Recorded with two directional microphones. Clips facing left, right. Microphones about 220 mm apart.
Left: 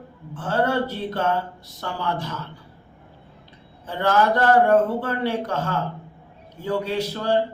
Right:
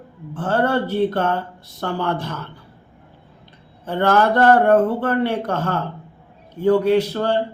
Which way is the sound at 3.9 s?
60° right (ahead or behind).